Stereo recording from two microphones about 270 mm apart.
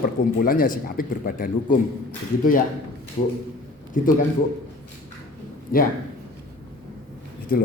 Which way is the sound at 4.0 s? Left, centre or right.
Left.